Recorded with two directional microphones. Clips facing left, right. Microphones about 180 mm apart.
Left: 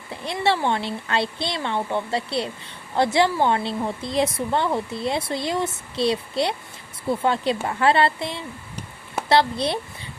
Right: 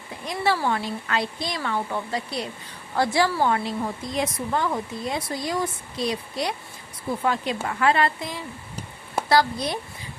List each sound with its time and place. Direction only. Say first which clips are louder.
0.3 s speech: left 2 dB; 25° left (ahead or behind)